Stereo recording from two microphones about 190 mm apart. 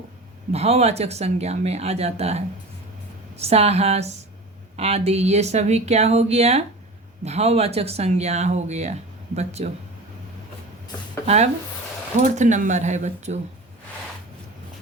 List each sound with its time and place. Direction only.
0.5 s speech: 35° right (ahead or behind)
12.2 s speech: 40° right (ahead or behind)